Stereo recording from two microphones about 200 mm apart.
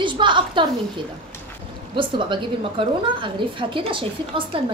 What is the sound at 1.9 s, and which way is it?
A woman's voice, 25° right (ahead or behind).